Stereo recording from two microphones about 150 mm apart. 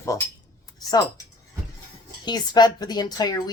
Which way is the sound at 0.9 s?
25° left (ahead or behind).